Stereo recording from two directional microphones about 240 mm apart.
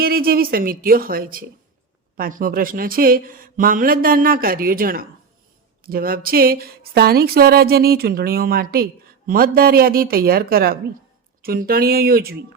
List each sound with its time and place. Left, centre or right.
0.0 s speech: right